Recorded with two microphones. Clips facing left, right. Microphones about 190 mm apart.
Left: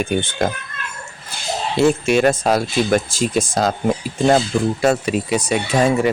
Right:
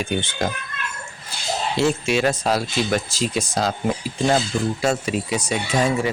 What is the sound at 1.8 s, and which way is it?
Speech, 55° left (ahead or behind).